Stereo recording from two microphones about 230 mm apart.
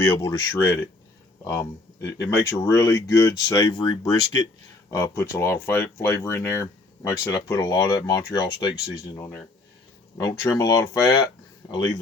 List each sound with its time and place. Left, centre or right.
0.0 s speech: centre